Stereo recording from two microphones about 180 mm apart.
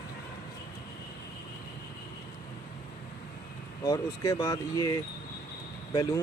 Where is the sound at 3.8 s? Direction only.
20° left (ahead or behind).